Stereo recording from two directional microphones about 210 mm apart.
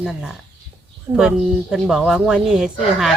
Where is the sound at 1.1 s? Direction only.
15° right (ahead or behind).